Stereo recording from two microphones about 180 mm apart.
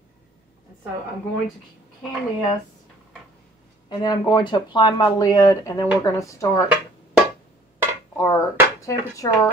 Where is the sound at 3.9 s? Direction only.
25° left (ahead or behind).